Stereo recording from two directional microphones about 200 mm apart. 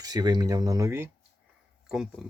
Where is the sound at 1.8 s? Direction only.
Centre (ahead or behind).